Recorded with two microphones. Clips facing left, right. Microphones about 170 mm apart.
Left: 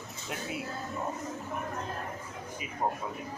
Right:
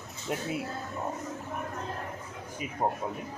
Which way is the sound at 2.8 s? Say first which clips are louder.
Right 2 dB; 30° right (ahead or behind).